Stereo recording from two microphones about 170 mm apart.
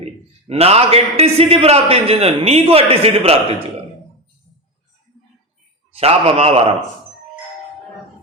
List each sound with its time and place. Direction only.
0.0 s a man's voice: 35° right (ahead or behind)
5.9 s a man's voice: 35° right (ahead or behind)